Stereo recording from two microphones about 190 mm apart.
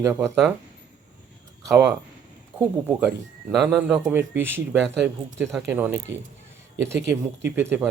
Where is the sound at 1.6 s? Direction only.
15° right (ahead or behind).